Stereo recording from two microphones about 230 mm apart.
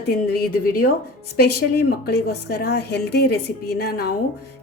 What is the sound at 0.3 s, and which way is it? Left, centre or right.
A woman's voice, left.